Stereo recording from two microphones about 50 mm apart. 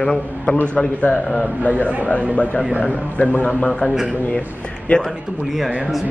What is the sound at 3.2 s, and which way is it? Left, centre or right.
Speech, left.